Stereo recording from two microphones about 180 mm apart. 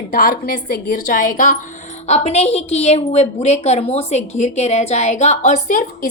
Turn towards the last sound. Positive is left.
turn(degrees=45)  # may be behind; listen again after turning